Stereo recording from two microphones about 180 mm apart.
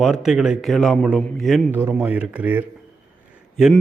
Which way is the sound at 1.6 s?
10° right (ahead or behind).